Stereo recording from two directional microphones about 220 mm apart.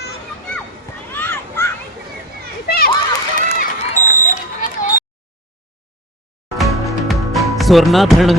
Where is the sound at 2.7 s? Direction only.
45° left (ahead or behind).